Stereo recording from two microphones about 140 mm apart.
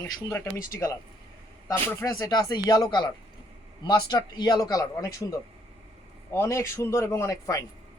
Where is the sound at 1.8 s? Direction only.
20° left (ahead or behind).